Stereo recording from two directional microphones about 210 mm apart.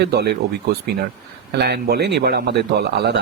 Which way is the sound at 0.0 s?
50° right (ahead or behind).